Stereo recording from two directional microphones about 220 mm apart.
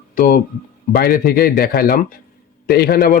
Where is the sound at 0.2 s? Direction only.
40° left (ahead or behind).